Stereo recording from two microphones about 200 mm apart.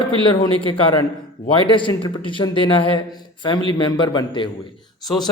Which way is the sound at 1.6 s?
25° left (ahead or behind).